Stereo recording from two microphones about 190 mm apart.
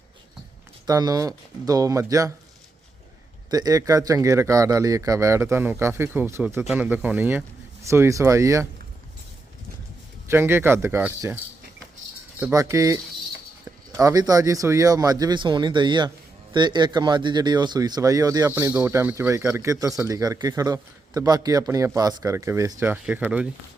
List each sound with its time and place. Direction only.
0.9 s speech: 20° right (ahead or behind)
3.5 s a man's voice: 20° right (ahead or behind)
10.2 s a man's voice: 10° right (ahead or behind)
12.4 s a man's voice: 10° right (ahead or behind)